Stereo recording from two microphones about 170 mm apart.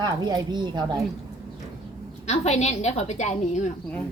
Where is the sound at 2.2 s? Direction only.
40° left (ahead or behind).